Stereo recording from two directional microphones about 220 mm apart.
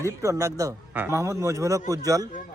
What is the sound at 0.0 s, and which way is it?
Speech, 15° right (ahead or behind).